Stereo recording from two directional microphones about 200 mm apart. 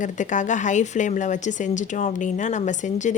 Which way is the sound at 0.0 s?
40° left (ahead or behind).